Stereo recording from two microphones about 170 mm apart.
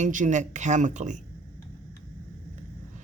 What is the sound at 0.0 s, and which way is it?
Speech, 45° right (ahead or behind).